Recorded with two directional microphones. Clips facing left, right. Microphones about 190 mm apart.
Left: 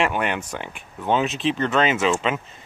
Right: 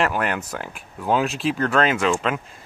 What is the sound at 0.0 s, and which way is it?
Speech, centre (ahead or behind).